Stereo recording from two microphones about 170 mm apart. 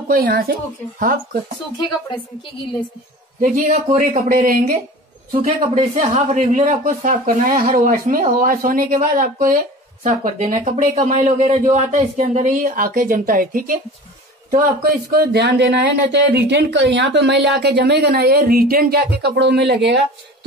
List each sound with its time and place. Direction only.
0.1 s speech: 60° right (ahead or behind)
3.3 s speech: 50° right (ahead or behind)
15.0 s speech: 75° right (ahead or behind)
19.2 s speech: 85° right